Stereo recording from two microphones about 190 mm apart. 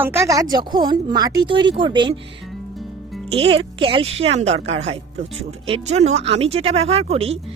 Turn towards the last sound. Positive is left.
turn(degrees=-30)  # may be behind; listen again after turning